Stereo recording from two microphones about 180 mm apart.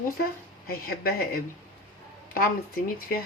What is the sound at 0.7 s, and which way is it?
Speech, 55° left (ahead or behind).